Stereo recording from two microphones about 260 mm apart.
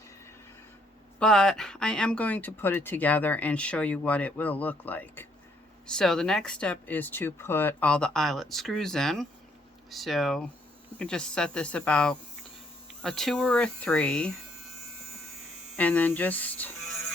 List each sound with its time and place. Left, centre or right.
1.2 s speech: centre
15.7 s speech: centre